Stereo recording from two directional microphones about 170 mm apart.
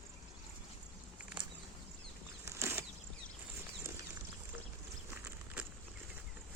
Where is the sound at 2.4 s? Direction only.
15° right (ahead or behind).